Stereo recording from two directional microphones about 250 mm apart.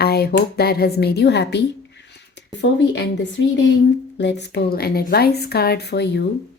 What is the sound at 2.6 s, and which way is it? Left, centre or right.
Speech, left.